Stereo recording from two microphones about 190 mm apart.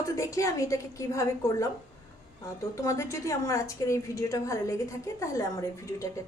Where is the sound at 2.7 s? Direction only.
15° left (ahead or behind).